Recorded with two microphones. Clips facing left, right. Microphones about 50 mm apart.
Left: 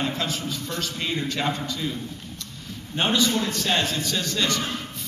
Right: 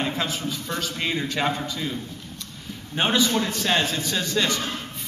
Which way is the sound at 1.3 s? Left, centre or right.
Centre.